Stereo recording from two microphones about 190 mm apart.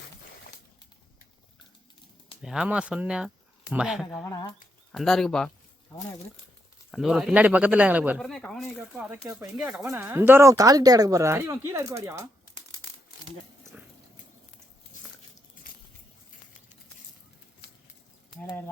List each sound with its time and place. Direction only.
2.4 s speech: 5° right (ahead or behind)
4.3 s speech: 20° left (ahead or behind)
4.9 s speech: centre (ahead or behind)
6.9 s speech: centre (ahead or behind)
8.2 s speech: 5° left (ahead or behind)
9.6 s speech: 15° right (ahead or behind)
13.7 s dog: 10° right (ahead or behind)
14.9 s biting: 40° left (ahead or behind)